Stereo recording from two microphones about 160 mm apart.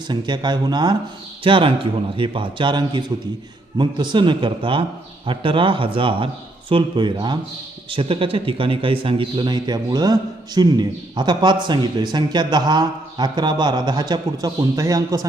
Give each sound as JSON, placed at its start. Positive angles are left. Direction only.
{"t": 0.1, "sound": "a man's voice", "side_deg": -25}